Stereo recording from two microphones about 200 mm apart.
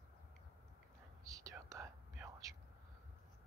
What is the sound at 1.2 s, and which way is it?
Whispering, 15° right (ahead or behind).